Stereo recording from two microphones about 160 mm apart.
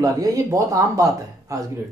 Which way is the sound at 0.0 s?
20° right (ahead or behind).